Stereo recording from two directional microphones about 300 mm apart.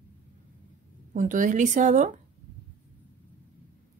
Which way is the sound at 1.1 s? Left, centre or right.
Right.